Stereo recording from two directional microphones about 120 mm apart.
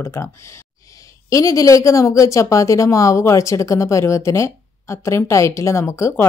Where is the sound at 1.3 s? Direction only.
25° left (ahead or behind).